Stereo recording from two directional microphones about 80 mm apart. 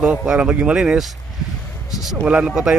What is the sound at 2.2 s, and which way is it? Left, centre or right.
Speech, centre.